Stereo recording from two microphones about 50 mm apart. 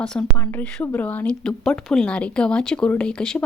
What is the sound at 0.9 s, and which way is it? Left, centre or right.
Speech, left.